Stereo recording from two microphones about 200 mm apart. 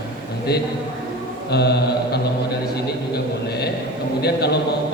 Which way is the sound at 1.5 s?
55° left (ahead or behind).